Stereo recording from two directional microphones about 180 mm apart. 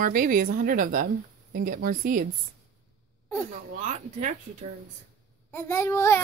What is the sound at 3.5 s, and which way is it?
Speech, 45° right (ahead or behind).